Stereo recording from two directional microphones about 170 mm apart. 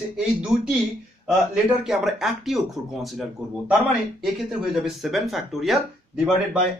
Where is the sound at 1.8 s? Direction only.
Centre (ahead or behind).